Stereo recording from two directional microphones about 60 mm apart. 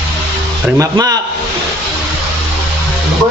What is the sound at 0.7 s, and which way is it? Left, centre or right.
Speech, right.